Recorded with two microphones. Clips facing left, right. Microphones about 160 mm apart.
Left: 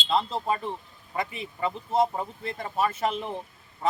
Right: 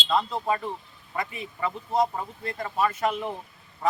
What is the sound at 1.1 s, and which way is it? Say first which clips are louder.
A man's voice: left 1 dB; 25° left (ahead or behind).